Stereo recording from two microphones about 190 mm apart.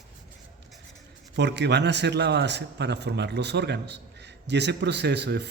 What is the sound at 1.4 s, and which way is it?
Speech, 65° right (ahead or behind).